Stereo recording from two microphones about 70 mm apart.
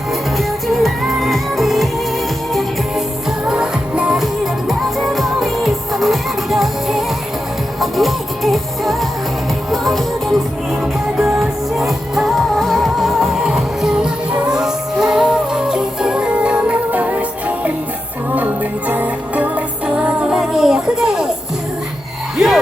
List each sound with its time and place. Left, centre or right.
0.1 s music: centre
3.4 s music: centre
4.7 s music: centre
11.2 s music: centre
11.8 s music: centre; by 19.6 s right
20.3 s music: centre
22.4 s a sound: centre